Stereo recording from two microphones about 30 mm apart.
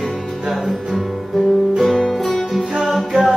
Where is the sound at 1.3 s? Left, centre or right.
Centre.